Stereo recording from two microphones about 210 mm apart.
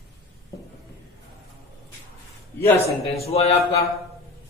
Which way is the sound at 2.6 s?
10° left (ahead or behind).